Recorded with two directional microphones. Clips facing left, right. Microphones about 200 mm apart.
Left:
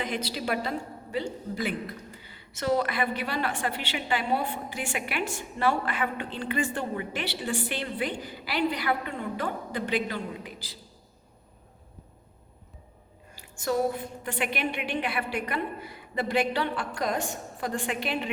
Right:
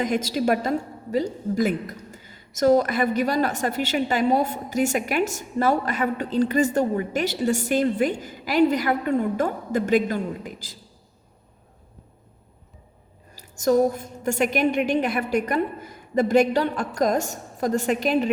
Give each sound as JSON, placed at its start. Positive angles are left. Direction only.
{"t": 0.0, "sound": "a woman's voice", "side_deg": -45}
{"t": 13.3, "sound": "a woman's voice", "side_deg": -40}